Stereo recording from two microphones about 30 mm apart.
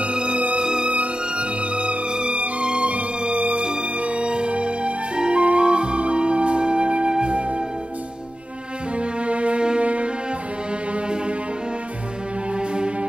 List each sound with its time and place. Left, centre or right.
0.0 s music: right
0.8 s music: right
7.1 s flute: right
7.3 s music: right
8.9 s music: right
12.5 s music: right